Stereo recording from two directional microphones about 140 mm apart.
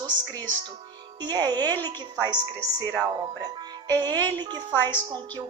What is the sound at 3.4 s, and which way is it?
Music, 30° right (ahead or behind).